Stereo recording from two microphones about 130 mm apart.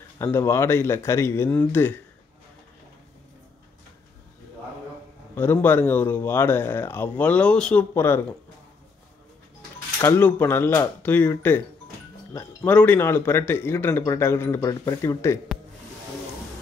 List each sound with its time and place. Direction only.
0.2 s speech: 20° left (ahead or behind)
5.3 s speech: 15° left (ahead or behind)
7.9 s speech: 20° left (ahead or behind)
9.9 s speech: 20° left (ahead or behind)